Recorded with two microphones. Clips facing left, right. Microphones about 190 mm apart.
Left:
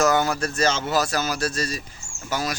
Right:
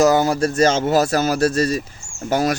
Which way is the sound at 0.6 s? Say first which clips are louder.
Right 6 dB; 45° right (ahead or behind).